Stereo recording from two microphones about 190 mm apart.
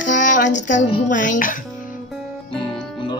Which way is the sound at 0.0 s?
45° left (ahead or behind).